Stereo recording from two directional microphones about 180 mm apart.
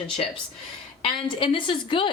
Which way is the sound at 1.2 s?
30° left (ahead or behind).